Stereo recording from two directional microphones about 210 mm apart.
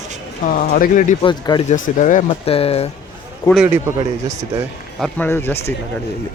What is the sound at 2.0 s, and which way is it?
Speech, 35° left (ahead or behind).